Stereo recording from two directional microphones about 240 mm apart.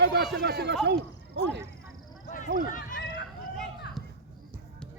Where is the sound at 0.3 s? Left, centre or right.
Right.